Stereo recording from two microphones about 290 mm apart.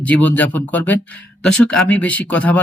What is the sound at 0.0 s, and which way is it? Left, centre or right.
Speech, centre.